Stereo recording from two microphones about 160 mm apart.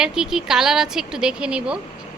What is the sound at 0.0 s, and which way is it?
Speech, 5° right (ahead or behind).